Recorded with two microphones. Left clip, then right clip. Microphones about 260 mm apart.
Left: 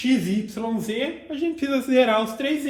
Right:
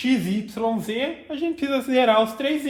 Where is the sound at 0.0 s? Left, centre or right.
Right.